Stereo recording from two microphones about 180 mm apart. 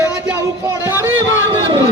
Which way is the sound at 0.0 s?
15° right (ahead or behind).